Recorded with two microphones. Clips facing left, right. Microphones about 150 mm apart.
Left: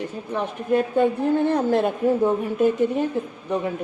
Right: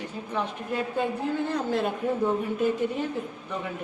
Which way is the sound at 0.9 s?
60° left (ahead or behind).